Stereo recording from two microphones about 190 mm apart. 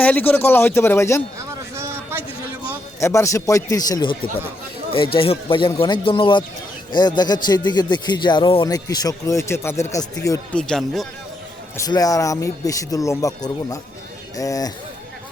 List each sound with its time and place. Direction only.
0.0 s speech: 10° left (ahead or behind)
1.4 s a sound: 15° right (ahead or behind)
3.0 s a man's voice: 15° left (ahead or behind)
10.5 s speech: 5° left (ahead or behind)
11.9 s speech: 20° left (ahead or behind)